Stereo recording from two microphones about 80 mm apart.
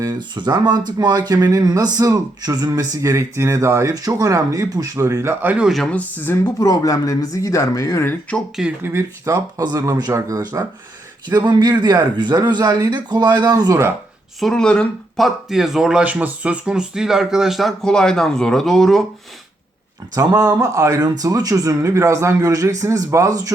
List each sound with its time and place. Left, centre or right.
0.0 s speech: right
5.3 s speech: right
5.9 s speech: left
6.4 s speech: left
8.8 s speech: right
10.1 s speech: right
11.3 s a man's voice: right
14.3 s speech: centre
20.1 s speech: right
21.0 s speech: right